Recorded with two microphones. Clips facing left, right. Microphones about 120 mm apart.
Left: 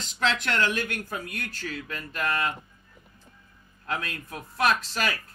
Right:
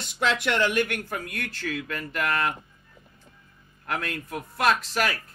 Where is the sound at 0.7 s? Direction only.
70° right (ahead or behind).